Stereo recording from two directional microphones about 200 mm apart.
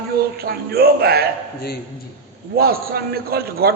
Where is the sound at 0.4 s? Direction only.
50° right (ahead or behind).